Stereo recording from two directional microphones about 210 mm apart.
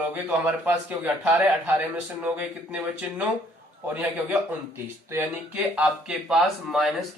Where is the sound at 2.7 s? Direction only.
5° right (ahead or behind).